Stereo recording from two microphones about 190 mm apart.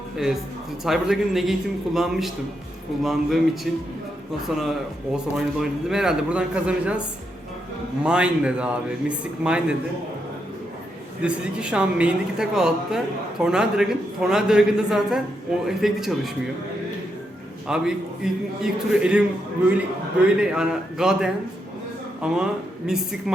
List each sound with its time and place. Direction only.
0.9 s a man's voice: centre (ahead or behind)
8.0 s a man's voice: 5° right (ahead or behind)
11.2 s a man's voice: 5° right (ahead or behind)
17.7 s a man's voice: 5° right (ahead or behind)
20.2 s a man's voice: 5° right (ahead or behind)